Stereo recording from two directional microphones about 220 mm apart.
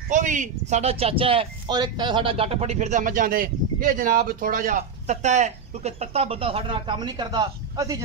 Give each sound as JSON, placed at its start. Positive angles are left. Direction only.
{"t": 0.1, "sound": "speech", "side_deg": -35}